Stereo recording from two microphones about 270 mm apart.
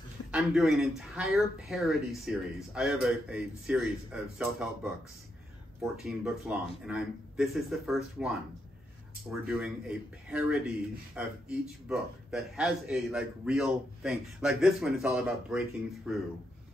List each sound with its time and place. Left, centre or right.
0.3 s a man's voice: centre
5.9 s a man's voice: centre